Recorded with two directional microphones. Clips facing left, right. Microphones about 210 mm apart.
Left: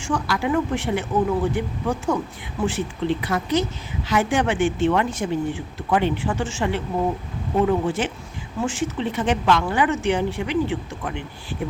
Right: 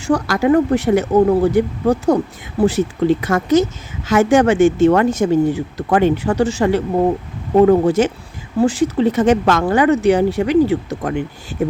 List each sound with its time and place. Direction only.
0.0 s speech: 40° right (ahead or behind)